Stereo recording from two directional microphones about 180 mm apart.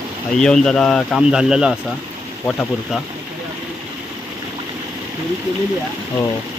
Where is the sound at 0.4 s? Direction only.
5° left (ahead or behind).